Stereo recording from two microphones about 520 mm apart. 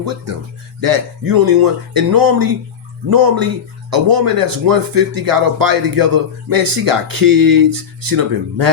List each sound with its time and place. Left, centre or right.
0.0 s speech: right